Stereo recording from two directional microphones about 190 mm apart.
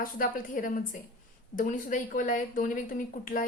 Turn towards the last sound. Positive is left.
turn(degrees=45)  # may be behind; listen again after turning